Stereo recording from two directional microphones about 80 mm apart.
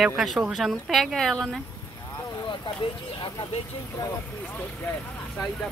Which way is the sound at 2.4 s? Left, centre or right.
Left.